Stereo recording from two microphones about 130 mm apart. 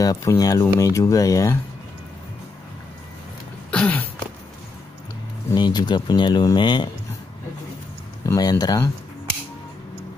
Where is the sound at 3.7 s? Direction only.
10° left (ahead or behind).